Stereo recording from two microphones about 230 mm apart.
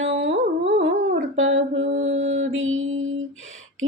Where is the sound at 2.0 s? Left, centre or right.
Right.